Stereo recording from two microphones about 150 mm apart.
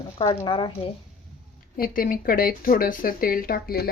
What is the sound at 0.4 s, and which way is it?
Speech, 35° left (ahead or behind).